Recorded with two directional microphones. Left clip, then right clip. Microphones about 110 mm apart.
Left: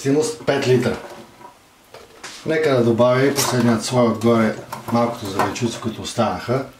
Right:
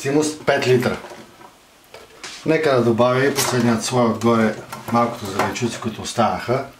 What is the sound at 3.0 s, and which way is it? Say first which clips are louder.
Speech: left 1 dB; 15° right (ahead or behind).